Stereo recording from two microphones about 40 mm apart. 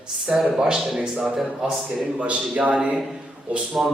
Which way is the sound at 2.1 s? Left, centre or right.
Right.